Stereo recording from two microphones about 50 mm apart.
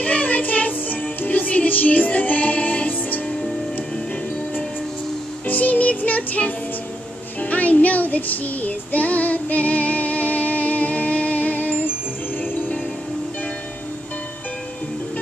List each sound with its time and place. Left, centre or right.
0.0 s music: left
5.5 s music: left